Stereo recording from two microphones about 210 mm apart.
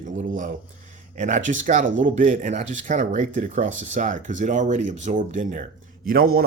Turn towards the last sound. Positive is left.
turn(degrees=-45)  # may be behind; listen again after turning